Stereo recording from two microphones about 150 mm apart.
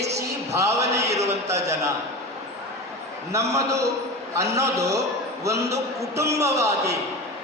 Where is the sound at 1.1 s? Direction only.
45° right (ahead or behind).